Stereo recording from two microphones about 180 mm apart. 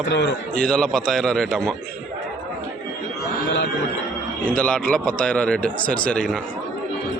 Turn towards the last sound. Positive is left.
turn(degrees=5)  # may be behind; listen again after turning